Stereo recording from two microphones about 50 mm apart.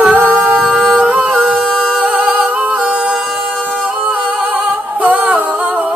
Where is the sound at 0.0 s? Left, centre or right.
Right.